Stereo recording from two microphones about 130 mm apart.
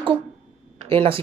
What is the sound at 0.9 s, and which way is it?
Speech, 45° right (ahead or behind).